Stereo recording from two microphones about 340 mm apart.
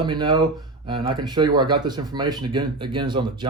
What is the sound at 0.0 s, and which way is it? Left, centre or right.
Speech, centre.